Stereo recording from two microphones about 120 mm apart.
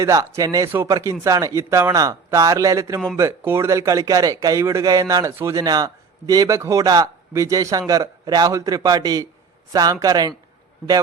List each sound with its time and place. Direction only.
0.0 s speech: 25° right (ahead or behind)